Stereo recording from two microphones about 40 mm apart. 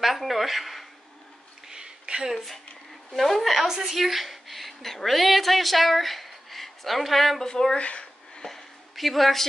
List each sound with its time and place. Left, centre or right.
0.0 s speech: centre
1.7 s a sound: centre
2.3 s a woman's voice: centre
7.4 s speech: centre
7.8 s speech: left
8.4 s a sound: centre